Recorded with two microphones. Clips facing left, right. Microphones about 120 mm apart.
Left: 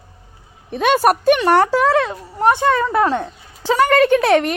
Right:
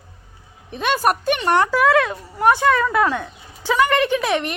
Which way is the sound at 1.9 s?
20° left (ahead or behind).